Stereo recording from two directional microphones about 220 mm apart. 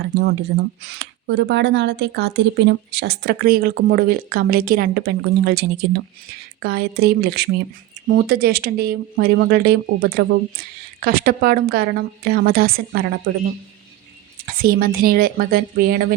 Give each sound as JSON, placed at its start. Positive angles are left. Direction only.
{"t": 0.0, "sound": "speech", "side_deg": -45}
{"t": 14.4, "sound": "speech", "side_deg": -40}